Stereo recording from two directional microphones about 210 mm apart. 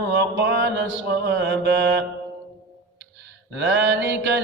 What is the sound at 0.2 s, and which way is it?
Mantra, 55° right (ahead or behind).